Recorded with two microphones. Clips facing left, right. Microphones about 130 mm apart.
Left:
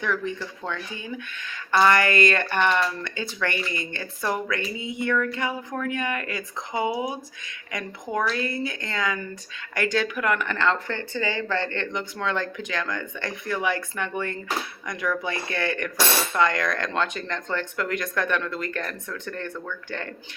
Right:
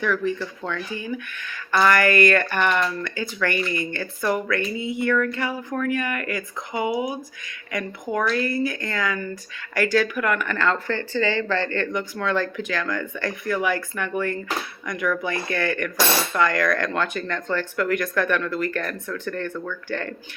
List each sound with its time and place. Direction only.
0.0 s speech: 25° left (ahead or behind)